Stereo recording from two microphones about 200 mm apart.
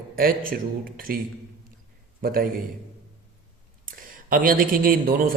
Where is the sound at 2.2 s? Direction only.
45° right (ahead or behind).